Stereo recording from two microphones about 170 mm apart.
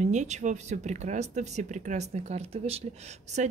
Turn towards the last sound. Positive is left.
turn(degrees=-40)  # may be behind; listen again after turning